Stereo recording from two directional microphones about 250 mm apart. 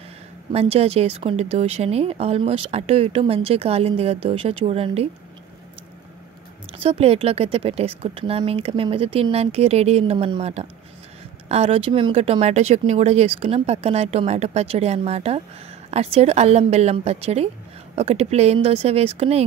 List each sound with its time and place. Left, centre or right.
0.5 s speech: right
6.8 s speech: right